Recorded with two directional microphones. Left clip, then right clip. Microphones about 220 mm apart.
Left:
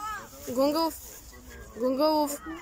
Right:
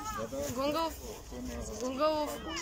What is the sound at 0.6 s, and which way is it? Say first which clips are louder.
A child's voice: left 8 dB; 25° left (ahead or behind).